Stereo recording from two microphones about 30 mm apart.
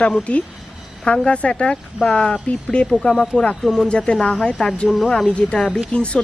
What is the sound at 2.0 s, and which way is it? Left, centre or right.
Speech, left.